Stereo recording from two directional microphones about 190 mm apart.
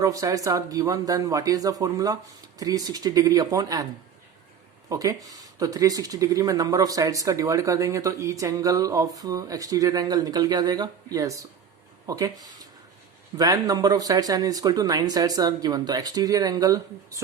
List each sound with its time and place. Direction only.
0.0 s speech: 15° right (ahead or behind)
4.9 s speech: 20° right (ahead or behind)
13.3 s speech: 20° right (ahead or behind)